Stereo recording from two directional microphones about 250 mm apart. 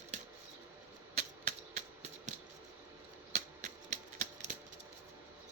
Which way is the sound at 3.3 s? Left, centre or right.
Right.